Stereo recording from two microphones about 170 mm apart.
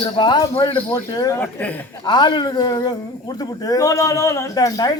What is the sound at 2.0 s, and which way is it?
Speech, 25° left (ahead or behind).